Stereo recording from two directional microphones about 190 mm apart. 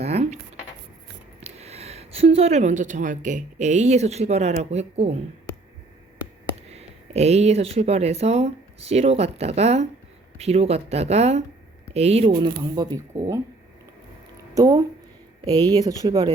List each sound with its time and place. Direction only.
0.0 s a sound: 35° right (ahead or behind)
1.4 s speech: 35° right (ahead or behind)
6.7 s speech: 35° right (ahead or behind)
12.6 s speech: 20° right (ahead or behind)
14.5 s speech: 15° right (ahead or behind)